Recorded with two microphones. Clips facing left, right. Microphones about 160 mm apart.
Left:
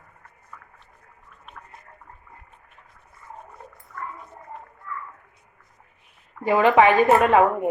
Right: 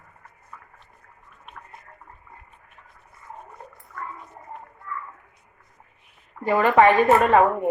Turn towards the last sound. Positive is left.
turn(degrees=10)  # may be behind; listen again after turning